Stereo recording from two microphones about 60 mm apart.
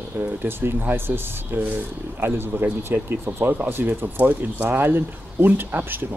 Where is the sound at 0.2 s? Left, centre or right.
Right.